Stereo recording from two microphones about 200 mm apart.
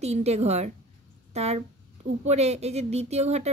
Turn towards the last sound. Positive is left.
turn(degrees=-35)  # may be behind; listen again after turning